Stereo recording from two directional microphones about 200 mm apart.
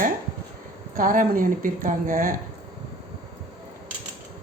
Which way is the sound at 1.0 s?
45° right (ahead or behind).